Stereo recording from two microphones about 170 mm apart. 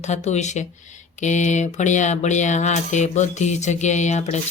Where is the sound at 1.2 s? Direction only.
45° left (ahead or behind).